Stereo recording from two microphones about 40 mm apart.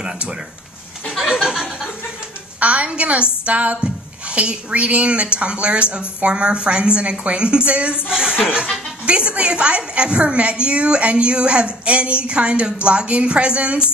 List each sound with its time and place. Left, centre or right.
1.1 s a sound: centre
2.6 s a woman's voice: right
8.1 s a woman's voice: centre